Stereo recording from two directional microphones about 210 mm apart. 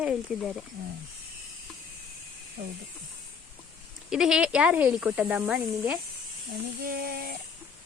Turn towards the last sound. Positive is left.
turn(degrees=-45)  # may be behind; listen again after turning